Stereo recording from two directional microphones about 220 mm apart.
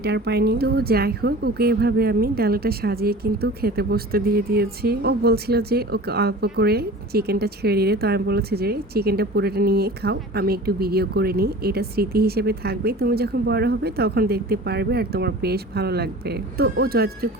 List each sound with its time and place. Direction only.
0.0 s speech: 50° right (ahead or behind)